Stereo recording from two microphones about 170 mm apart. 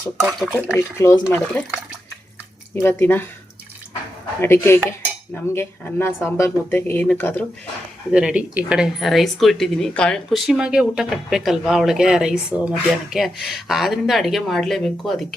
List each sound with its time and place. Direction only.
0.2 s speech: centre (ahead or behind)
1.0 s cutlery: 15° left (ahead or behind)
2.7 s cutlery: 10° left (ahead or behind)
4.4 s cutlery: 15° left (ahead or behind)
8.1 s speech: 5° right (ahead or behind)